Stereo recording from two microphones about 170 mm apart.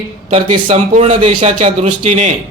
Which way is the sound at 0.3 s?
35° right (ahead or behind).